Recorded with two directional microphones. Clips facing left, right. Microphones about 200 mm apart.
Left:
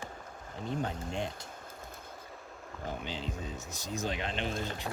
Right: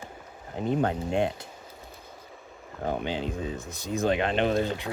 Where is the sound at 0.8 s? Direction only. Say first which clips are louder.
Right 9 dB; 65° right (ahead or behind).